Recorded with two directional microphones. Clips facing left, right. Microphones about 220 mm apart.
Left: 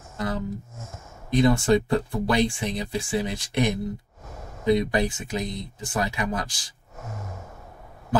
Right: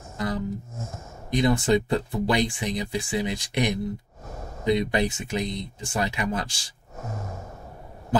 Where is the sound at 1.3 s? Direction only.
15° right (ahead or behind).